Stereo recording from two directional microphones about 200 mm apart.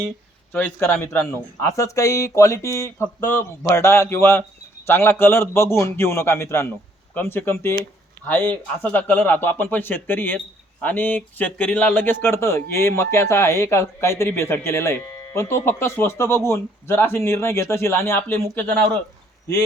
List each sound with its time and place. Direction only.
0.5 s speech: 10° left (ahead or behind)